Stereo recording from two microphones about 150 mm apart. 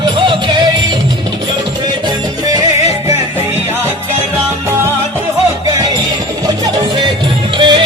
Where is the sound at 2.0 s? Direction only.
25° right (ahead or behind).